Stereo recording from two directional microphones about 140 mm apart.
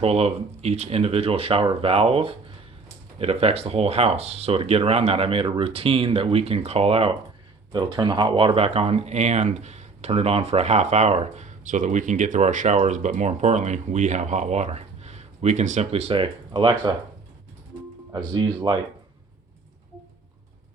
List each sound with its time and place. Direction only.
0.0 s speech: 45° right (ahead or behind)
18.1 s speech: 30° right (ahead or behind)